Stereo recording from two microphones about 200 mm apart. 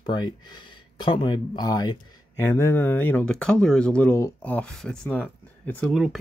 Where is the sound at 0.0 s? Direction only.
20° left (ahead or behind).